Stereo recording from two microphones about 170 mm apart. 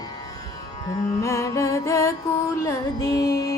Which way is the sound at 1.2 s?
20° left (ahead or behind).